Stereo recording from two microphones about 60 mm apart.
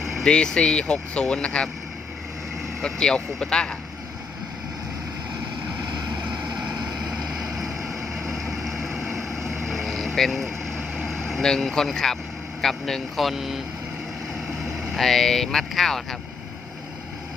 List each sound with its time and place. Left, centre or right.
0.0 s vehicle: centre
0.3 s speech: centre
2.8 s speech: centre
6.7 s vehicle: centre
10.9 s speech: centre
14.6 s speech: centre